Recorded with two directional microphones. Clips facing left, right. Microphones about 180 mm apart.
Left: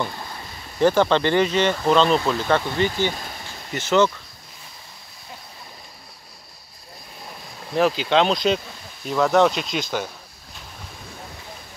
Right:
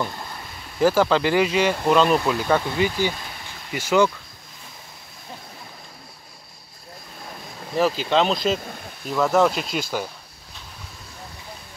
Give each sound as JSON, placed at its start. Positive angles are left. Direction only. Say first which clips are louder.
{"t": 0.0, "sound": "speech", "louder": "even", "side_deg": 5}
{"t": 7.7, "sound": "speech", "louder": "left 1 dB", "side_deg": 0}